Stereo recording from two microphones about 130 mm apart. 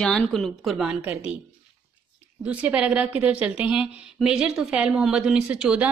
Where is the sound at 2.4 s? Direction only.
10° right (ahead or behind).